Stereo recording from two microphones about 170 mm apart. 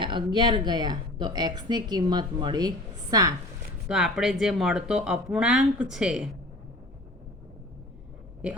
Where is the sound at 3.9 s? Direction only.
5° right (ahead or behind).